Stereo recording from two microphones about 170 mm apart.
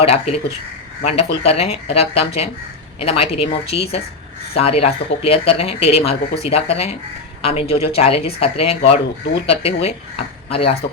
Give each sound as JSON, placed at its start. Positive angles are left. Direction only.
{"t": 0.0, "sound": "speech", "side_deg": 35}